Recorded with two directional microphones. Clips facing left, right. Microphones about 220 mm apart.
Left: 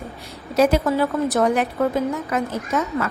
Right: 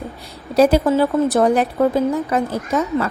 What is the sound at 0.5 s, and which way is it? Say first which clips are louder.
Speech: right 4 dB; 35° right (ahead or behind).